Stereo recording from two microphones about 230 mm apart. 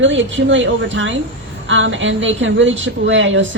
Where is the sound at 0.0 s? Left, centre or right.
Right.